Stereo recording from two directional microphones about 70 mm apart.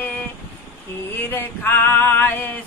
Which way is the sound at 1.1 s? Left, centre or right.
Left.